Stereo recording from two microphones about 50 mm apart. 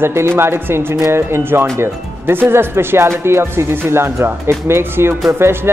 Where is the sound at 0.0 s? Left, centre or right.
Right.